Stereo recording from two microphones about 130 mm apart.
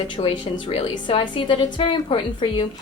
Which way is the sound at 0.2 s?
45° left (ahead or behind).